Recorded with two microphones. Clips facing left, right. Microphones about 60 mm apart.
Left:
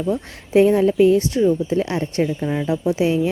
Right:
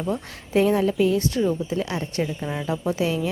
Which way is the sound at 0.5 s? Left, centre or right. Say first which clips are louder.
Left 5 dB; left.